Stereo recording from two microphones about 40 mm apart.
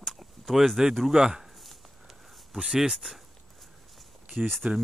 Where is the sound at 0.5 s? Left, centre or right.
Centre.